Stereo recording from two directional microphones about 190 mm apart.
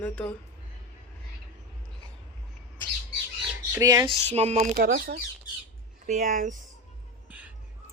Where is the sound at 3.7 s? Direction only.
15° right (ahead or behind).